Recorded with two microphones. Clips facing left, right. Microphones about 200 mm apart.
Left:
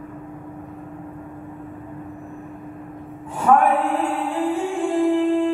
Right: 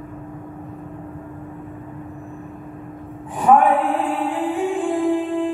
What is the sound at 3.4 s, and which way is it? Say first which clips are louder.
Music: right 2 dB; 15° right (ahead or behind).